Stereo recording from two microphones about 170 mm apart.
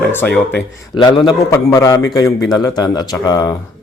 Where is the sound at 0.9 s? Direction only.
25° left (ahead or behind).